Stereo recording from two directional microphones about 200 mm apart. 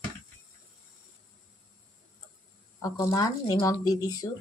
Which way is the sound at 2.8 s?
20° left (ahead or behind).